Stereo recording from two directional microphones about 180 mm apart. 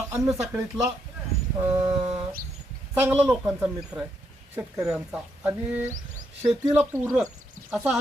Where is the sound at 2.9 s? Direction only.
10° right (ahead or behind).